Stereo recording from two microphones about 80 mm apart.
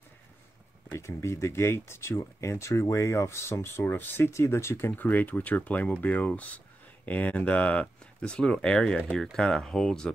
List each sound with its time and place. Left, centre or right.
0.9 s speech: left
4.9 s speech: left